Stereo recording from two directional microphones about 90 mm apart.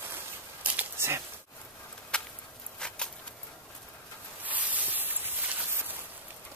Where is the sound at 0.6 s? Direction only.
15° right (ahead or behind).